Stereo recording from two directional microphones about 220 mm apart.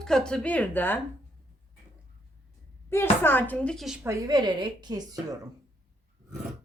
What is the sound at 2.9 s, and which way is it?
Speech, 10° left (ahead or behind).